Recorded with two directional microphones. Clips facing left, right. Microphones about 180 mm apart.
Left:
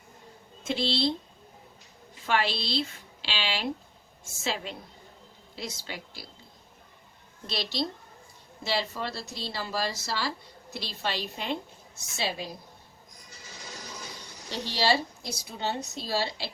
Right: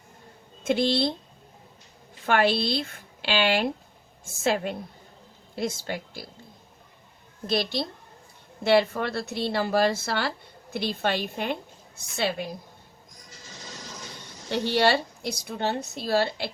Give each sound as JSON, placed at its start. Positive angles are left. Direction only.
{"t": 0.6, "sound": "a woman's voice", "side_deg": -55}
{"t": 2.2, "sound": "a woman's voice", "side_deg": -55}
{"t": 7.4, "sound": "a woman's voice", "side_deg": -50}
{"t": 14.5, "sound": "speech", "side_deg": -60}